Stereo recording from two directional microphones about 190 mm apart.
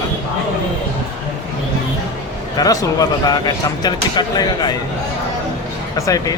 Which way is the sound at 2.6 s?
20° left (ahead or behind).